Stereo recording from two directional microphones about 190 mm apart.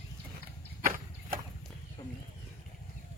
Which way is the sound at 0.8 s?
45° right (ahead or behind).